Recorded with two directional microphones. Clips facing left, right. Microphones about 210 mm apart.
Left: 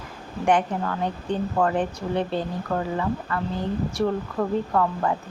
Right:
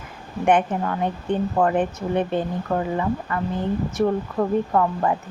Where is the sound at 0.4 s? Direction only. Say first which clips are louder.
Right 3 dB; 20° right (ahead or behind).